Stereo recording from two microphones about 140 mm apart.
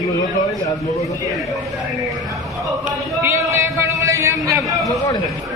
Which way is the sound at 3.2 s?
20° right (ahead or behind).